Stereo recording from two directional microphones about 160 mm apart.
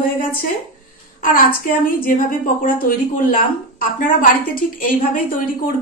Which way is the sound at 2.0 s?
60° left (ahead or behind).